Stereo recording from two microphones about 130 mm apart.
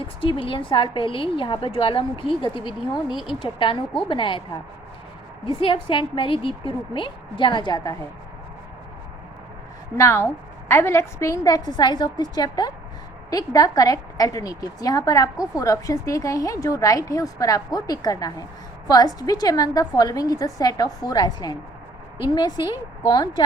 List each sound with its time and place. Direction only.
0.0 s a woman's voice: 45° left (ahead or behind)
5.5 s a woman's voice: 40° left (ahead or behind)
10.0 s a woman's voice: 20° left (ahead or behind)